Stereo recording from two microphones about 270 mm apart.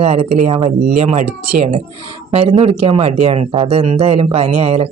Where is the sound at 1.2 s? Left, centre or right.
Right.